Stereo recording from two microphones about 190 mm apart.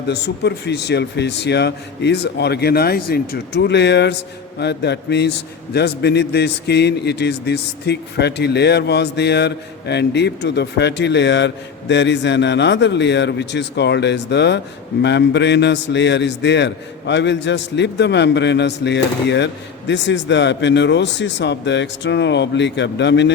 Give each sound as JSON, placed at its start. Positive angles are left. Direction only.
{"t": 0.1, "sound": "a man's voice", "side_deg": 60}